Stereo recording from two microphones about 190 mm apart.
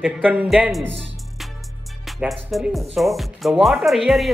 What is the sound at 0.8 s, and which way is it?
Speech, 70° right (ahead or behind).